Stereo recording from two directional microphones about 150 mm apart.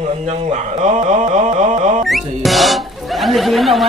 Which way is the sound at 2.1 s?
Centre (ahead or behind).